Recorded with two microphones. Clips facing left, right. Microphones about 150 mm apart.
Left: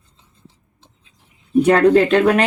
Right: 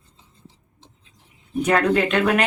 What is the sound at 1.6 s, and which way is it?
Speech, 35° left (ahead or behind).